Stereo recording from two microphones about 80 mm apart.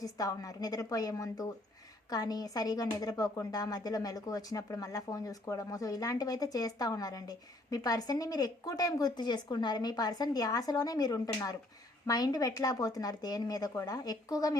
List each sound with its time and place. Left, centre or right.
0.0 s speech: left